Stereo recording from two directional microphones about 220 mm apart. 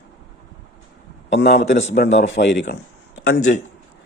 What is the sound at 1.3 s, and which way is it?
Speech, 45° left (ahead or behind).